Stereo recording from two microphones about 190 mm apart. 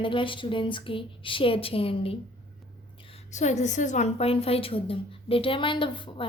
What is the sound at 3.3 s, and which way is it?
A woman's voice, 40° left (ahead or behind).